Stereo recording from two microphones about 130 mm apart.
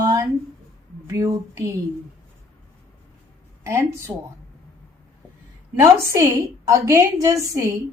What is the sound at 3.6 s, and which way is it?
Speech, 20° right (ahead or behind).